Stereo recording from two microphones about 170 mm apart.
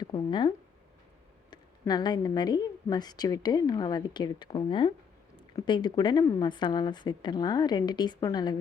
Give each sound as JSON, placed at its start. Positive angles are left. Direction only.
{"t": 0.0, "sound": "speech", "side_deg": 25}
{"t": 1.8, "sound": "a woman's voice", "side_deg": 25}